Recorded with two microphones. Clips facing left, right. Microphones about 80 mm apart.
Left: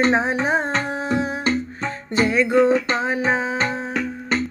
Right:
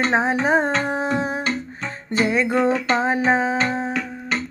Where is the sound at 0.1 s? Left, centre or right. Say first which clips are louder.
Right 1 dB; right.